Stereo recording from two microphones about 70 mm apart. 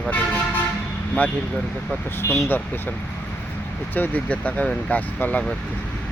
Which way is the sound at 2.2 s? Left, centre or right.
Left.